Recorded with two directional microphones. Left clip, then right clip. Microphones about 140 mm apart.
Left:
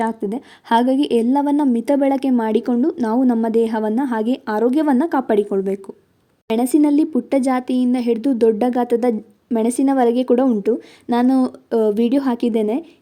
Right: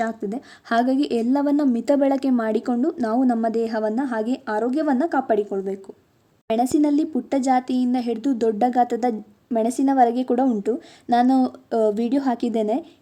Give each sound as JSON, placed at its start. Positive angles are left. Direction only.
{"t": 0.0, "sound": "speech", "side_deg": 20}
{"t": 6.5, "sound": "speech", "side_deg": 25}